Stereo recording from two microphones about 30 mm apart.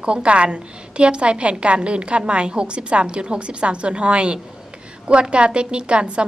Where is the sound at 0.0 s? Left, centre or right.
Right.